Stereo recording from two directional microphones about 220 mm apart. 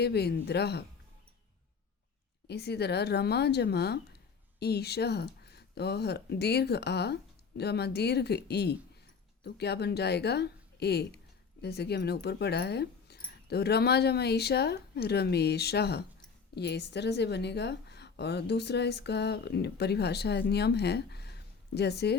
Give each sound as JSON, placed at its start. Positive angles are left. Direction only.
{"t": 0.0, "sound": "a woman's voice", "side_deg": 50}
{"t": 2.5, "sound": "a woman's voice", "side_deg": 50}